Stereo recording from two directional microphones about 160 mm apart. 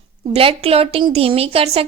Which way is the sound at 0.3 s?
35° right (ahead or behind).